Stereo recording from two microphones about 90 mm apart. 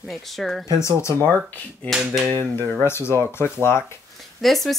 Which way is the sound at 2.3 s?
20° left (ahead or behind).